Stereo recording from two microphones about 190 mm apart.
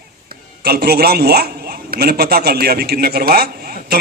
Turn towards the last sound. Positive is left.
turn(degrees=-55)  # may be behind; listen again after turning